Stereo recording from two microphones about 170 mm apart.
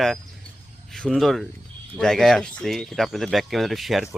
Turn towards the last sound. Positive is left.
turn(degrees=0)  # may be behind; listen again after turning